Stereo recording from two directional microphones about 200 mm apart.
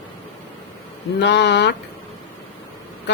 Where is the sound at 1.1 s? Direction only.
60° left (ahead or behind).